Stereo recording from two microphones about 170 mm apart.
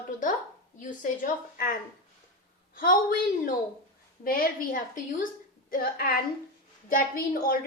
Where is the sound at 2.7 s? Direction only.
55° left (ahead or behind).